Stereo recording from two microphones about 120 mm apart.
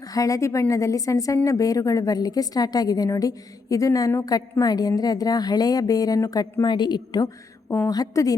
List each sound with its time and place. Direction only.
0.1 s a woman's voice: 30° left (ahead or behind)